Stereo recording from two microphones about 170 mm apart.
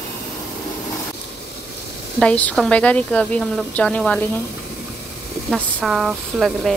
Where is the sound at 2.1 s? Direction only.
5° left (ahead or behind).